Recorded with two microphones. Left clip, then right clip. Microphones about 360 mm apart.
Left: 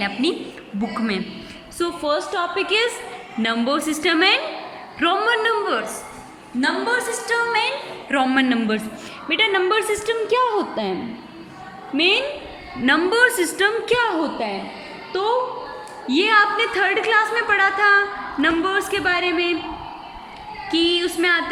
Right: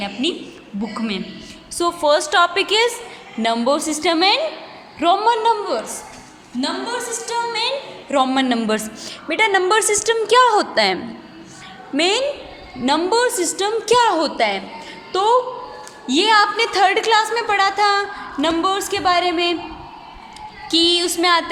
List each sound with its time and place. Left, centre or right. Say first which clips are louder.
0.0 s a woman's voice: left 1 dB; centre
1.8 s a woman's voice: right 5 dB; centre
11.9 s a woman's voice: right 1 dB; centre
20.7 s a woman's voice: right 3 dB; centre